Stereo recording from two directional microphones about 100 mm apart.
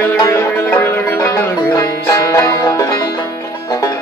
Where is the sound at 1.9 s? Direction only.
35° left (ahead or behind).